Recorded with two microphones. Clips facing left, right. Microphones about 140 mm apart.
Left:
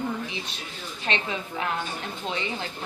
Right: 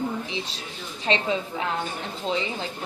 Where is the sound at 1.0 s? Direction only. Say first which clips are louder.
Right 5 dB; 30° right (ahead or behind).